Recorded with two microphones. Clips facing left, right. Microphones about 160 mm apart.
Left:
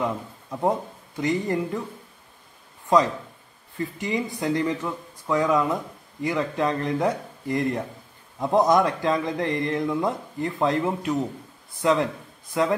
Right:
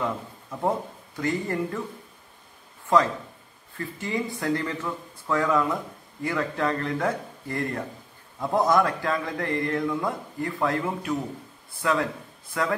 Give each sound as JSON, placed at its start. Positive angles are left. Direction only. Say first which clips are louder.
{"t": 0.0, "sound": "speech", "louder": "left 2 dB", "side_deg": 15}
{"t": 3.7, "sound": "speech", "louder": "left 3 dB", "side_deg": 20}